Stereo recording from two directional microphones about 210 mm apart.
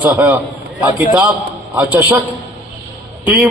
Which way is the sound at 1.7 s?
10° right (ahead or behind).